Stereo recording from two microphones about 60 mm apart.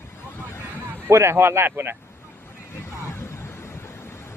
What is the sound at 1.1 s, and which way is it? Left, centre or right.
Speech, right.